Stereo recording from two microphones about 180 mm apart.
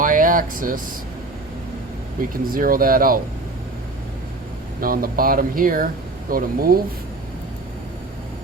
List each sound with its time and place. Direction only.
0.0 s air conditioning: 50° right (ahead or behind)
2.5 s speech: 55° right (ahead or behind)
4.8 s speech: 55° right (ahead or behind)